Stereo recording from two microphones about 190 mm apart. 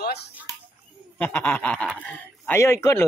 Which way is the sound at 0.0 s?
60° left (ahead or behind).